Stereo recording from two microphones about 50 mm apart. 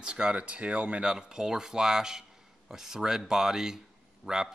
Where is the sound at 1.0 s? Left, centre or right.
Centre.